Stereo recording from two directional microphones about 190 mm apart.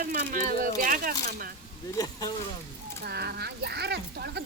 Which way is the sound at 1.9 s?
20° left (ahead or behind).